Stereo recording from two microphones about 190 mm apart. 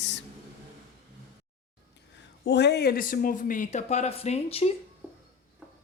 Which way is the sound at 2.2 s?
65° left (ahead or behind).